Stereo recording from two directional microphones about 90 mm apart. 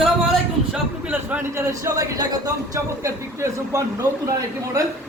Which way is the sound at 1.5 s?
35° right (ahead or behind).